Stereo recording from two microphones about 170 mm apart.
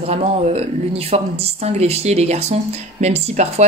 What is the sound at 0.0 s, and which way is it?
Speech, 35° right (ahead or behind).